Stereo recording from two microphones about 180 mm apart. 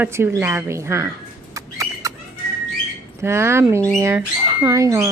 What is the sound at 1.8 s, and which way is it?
Bird, 15° right (ahead or behind).